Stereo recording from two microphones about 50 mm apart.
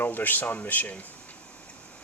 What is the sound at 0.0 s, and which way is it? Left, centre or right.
Speech, left.